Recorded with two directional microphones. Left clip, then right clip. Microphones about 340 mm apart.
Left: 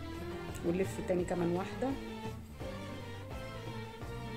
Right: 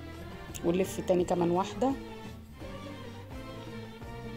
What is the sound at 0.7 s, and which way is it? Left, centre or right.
Speech, right.